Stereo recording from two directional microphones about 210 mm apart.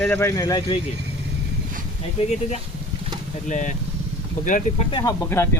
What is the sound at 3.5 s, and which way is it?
Speech, 35° left (ahead or behind).